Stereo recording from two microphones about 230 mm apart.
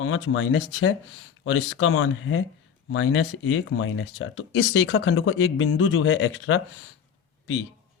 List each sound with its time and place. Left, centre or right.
0.0 s speech: left